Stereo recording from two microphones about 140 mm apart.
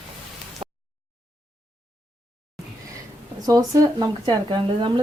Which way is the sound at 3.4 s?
25° right (ahead or behind).